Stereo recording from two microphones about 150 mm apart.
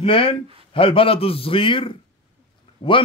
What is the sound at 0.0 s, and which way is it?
A man's voice, 35° left (ahead or behind).